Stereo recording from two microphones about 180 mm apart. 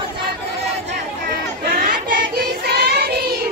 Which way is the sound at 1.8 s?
55° right (ahead or behind).